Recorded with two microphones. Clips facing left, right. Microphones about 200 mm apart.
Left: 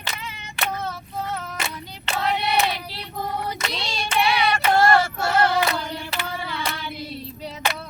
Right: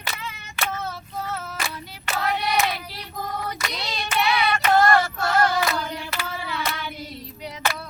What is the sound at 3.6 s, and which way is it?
Hands, 30° left (ahead or behind).